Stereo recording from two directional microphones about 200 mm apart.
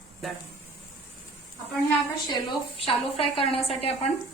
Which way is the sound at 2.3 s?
25° left (ahead or behind).